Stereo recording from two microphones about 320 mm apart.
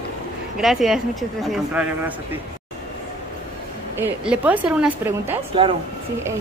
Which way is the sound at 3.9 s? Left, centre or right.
Centre.